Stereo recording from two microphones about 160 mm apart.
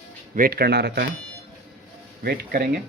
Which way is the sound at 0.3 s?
70° right (ahead or behind).